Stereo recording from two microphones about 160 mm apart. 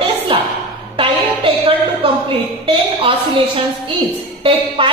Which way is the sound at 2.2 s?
35° right (ahead or behind).